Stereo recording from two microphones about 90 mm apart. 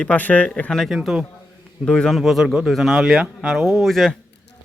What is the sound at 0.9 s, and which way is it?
Speech, 10° right (ahead or behind).